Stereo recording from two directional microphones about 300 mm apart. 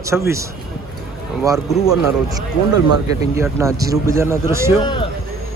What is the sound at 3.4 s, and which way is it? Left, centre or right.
Speech, centre.